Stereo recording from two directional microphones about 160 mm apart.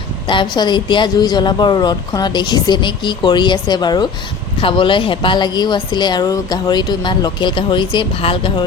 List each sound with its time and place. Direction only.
0.3 s speech: 30° left (ahead or behind)